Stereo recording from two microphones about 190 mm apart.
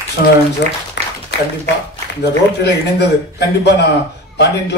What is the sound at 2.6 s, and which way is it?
A man's voice, 60° left (ahead or behind).